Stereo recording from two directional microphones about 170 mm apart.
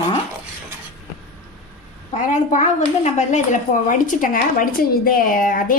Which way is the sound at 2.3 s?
45° left (ahead or behind).